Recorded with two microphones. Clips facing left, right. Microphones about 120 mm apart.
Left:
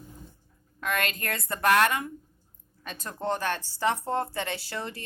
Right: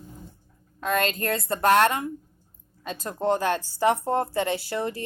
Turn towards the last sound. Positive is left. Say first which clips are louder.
# right 7 dB
turn(degrees=-30)  # may be behind; listen again after turning